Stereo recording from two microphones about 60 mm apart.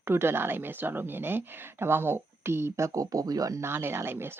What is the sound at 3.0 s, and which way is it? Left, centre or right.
Speech, right.